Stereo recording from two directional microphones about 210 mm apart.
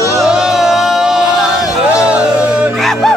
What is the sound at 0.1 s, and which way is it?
Music, centre (ahead or behind).